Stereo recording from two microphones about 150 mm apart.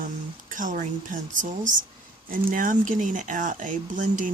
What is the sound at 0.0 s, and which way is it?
Speech, 60° right (ahead or behind).